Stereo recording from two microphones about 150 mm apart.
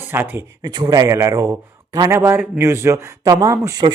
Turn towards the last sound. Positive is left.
turn(degrees=-25)  # may be behind; listen again after turning